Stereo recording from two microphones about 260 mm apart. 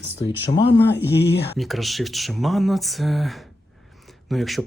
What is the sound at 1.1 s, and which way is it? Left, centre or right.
Speech, left.